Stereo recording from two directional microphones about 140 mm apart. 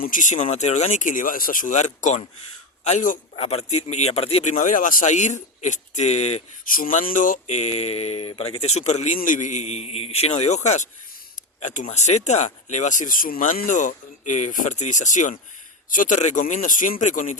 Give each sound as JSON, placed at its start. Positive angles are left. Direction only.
{"t": 0.0, "sound": "speech", "side_deg": 70}
{"t": 0.4, "sound": "speech", "side_deg": 55}
{"t": 3.3, "sound": "speech", "side_deg": 45}
{"t": 4.5, "sound": "speech", "side_deg": 70}
{"t": 6.7, "sound": "speech", "side_deg": 85}